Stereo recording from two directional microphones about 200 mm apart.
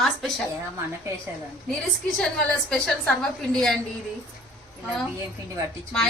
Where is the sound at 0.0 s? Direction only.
Centre (ahead or behind).